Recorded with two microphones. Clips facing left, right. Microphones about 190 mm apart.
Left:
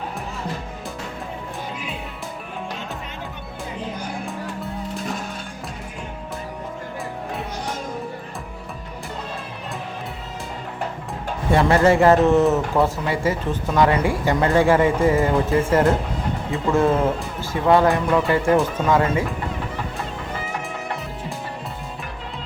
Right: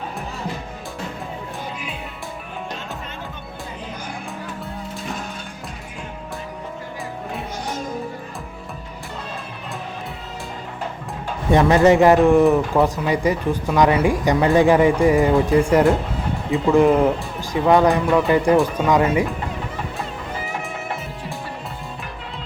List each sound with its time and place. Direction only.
11.5 s speech: 15° right (ahead or behind)